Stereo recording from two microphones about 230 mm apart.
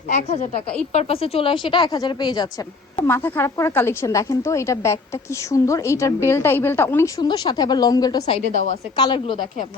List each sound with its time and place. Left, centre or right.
0.1 s a woman's voice: left
8.5 s a woman's voice: right
9.0 s speech: left